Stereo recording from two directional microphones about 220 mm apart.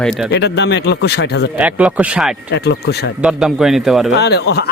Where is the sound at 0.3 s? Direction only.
50° left (ahead or behind).